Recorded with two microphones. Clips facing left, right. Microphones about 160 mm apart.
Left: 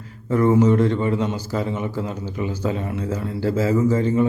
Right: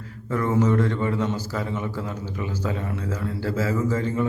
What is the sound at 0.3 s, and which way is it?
A man's voice, 25° left (ahead or behind).